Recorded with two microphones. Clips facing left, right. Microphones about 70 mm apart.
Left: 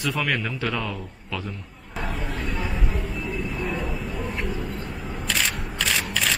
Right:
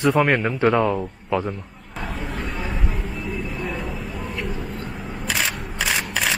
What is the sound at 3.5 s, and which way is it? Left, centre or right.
Vehicle, centre.